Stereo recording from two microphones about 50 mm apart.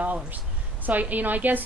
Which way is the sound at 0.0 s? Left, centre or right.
Right.